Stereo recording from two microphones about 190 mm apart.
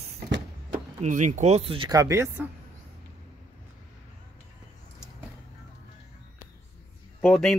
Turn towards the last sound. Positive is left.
turn(degrees=5)  # may be behind; listen again after turning